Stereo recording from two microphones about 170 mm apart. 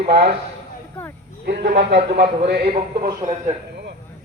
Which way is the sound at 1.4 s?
80° right.